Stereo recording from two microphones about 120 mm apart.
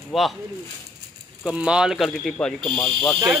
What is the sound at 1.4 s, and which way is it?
Speech, 10° right (ahead or behind).